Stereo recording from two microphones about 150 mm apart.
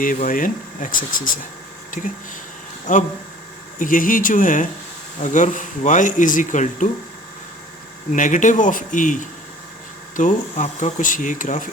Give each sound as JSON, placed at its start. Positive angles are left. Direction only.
{"t": 0.0, "sound": "speech", "side_deg": 65}
{"t": 2.0, "sound": "speech", "side_deg": 50}
{"t": 2.9, "sound": "speech", "side_deg": 60}
{"t": 8.1, "sound": "speech", "side_deg": 60}